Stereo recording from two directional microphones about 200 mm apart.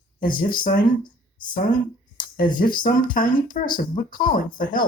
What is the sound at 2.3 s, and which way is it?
Speech, 45° left (ahead or behind).